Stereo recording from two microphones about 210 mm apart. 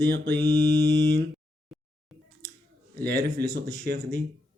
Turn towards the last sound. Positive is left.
turn(degrees=-50)  # may be behind; listen again after turning